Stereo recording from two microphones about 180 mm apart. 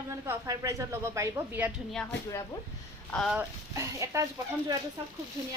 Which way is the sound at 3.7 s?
15° right (ahead or behind).